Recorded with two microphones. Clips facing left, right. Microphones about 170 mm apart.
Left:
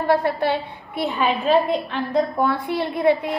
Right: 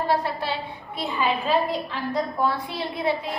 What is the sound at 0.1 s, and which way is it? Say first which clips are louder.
Speech: left 10 dB; 55° left (ahead or behind).